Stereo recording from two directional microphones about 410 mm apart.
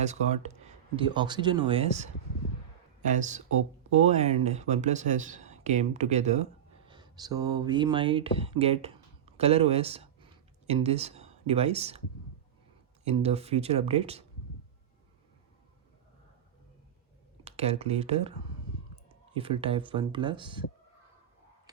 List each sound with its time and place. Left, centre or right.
0.0 s speech: centre
13.1 s speech: centre
17.4 s speech: centre